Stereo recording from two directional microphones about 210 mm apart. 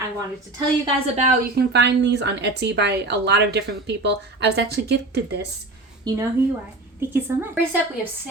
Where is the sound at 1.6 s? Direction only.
55° right (ahead or behind).